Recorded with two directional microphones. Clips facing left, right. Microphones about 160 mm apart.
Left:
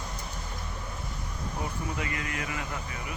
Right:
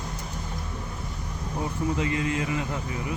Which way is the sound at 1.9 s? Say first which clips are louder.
Right 8 dB; 25° right (ahead or behind).